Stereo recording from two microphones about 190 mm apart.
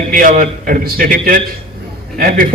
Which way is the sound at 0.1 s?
45° right (ahead or behind).